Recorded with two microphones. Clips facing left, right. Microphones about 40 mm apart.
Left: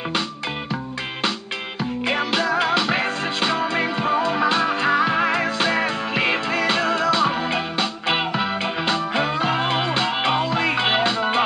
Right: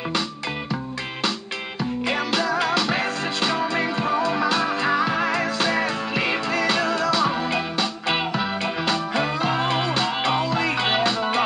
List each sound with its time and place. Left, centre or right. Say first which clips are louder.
1.8 s music: left 1 dB; centre